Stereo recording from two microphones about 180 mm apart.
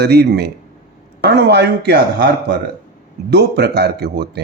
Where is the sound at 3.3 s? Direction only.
65° right (ahead or behind).